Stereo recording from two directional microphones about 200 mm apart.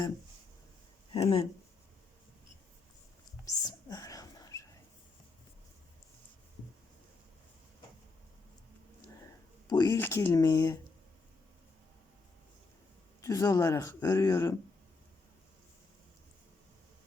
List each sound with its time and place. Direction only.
1.1 s speech: 30° left (ahead or behind)
3.4 s whispering: 20° left (ahead or behind)
9.6 s speech: 15° left (ahead or behind)
13.2 s speech: 15° left (ahead or behind)